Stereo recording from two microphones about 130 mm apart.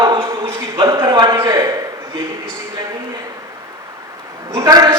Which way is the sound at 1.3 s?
20° right (ahead or behind).